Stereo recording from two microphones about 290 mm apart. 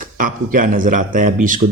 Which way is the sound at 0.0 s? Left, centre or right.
Right.